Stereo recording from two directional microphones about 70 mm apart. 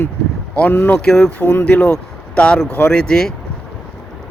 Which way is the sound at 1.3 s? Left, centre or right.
Left.